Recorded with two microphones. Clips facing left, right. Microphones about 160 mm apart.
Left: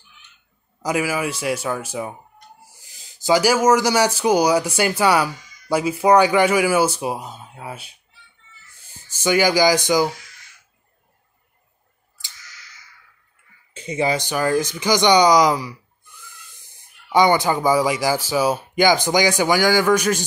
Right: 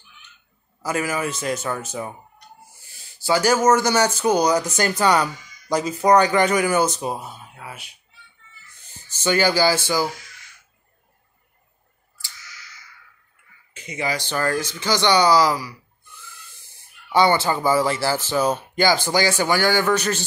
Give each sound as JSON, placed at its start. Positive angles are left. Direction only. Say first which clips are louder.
{"t": 0.8, "sound": "speech", "louder": "left 2 dB", "side_deg": 10}
{"t": 2.8, "sound": "a sound", "louder": "left 1 dB", "side_deg": 15}
{"t": 3.3, "sound": "speech", "louder": "left 2 dB", "side_deg": 10}
{"t": 7.3, "sound": "speech", "louder": "left 4 dB", "side_deg": 25}
{"t": 8.8, "sound": "speech", "louder": "left 2 dB", "side_deg": 10}
{"t": 13.7, "sound": "speech", "louder": "left 5 dB", "side_deg": 30}
{"t": 14.2, "sound": "speech", "louder": "left 3 dB", "side_deg": 15}
{"t": 17.1, "sound": "speech", "louder": "left 2 dB", "side_deg": 15}